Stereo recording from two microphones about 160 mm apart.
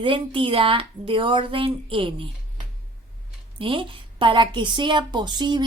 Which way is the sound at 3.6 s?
30° right (ahead or behind).